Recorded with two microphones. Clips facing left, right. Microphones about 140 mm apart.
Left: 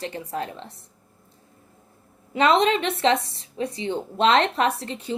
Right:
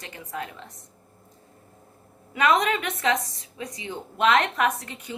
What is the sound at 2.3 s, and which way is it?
A woman's voice, 30° left (ahead or behind).